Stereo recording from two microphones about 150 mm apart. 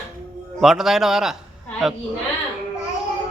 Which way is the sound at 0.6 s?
Centre (ahead or behind).